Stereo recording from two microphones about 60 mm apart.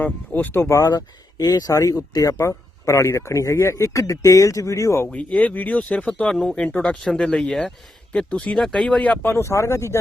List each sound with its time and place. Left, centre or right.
0.0 s speech: left
0.7 s speech: left
2.8 s speech: left
5.1 s speech: left
9.2 s speech: left